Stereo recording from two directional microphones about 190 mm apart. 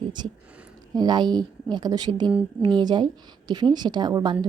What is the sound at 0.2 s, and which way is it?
A woman's voice, 25° right (ahead or behind).